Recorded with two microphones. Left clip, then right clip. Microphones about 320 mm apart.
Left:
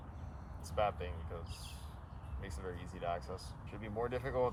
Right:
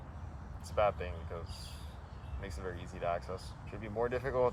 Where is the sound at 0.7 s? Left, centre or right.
Centre.